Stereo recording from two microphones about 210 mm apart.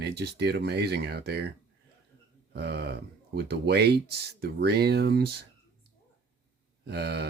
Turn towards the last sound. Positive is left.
turn(degrees=-50)  # may be behind; listen again after turning